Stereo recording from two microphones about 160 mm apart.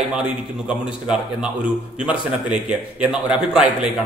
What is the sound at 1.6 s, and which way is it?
Speech, 5° right (ahead or behind).